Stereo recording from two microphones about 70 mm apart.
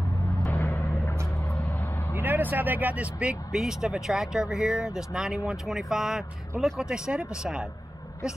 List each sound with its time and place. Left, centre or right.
0.5 s vehicle: left
2.1 s speech: right
3.5 s speech: centre